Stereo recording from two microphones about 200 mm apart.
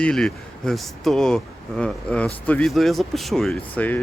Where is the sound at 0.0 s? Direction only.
5° left (ahead or behind).